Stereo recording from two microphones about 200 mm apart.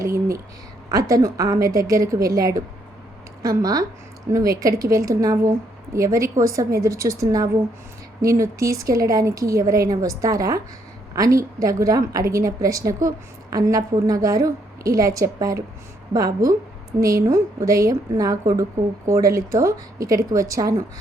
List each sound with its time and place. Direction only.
0.0 s a sound: 15° right (ahead or behind)
0.9 s a woman's voice: 15° right (ahead or behind)
17.0 s a woman's voice: 15° right (ahead or behind)